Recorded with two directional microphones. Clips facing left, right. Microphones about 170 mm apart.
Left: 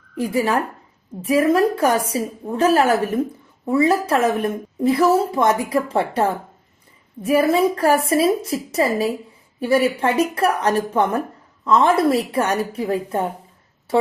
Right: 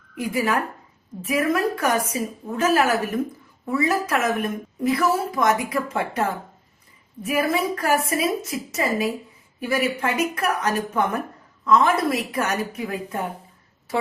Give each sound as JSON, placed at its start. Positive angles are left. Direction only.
{"t": 0.2, "sound": "a woman's voice", "side_deg": 30}